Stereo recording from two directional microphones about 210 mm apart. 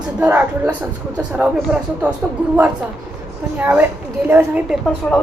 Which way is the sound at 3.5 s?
10° right (ahead or behind).